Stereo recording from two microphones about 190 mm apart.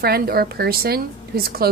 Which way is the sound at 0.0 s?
55° right (ahead or behind).